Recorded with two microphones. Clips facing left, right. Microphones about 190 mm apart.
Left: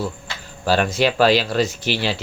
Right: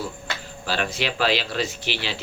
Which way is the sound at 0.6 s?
45° left (ahead or behind).